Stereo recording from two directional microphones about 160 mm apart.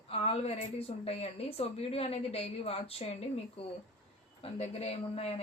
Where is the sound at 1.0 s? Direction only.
40° left (ahead or behind).